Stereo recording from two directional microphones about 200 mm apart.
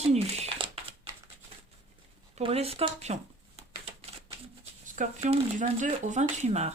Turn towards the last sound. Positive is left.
turn(degrees=-35)  # may be behind; listen again after turning